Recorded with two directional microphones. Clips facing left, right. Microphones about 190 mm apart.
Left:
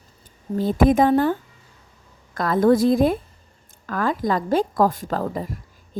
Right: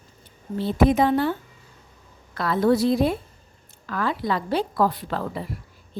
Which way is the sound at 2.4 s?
45° left (ahead or behind).